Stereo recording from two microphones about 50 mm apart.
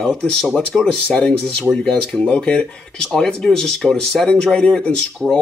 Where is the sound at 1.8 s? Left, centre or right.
Centre.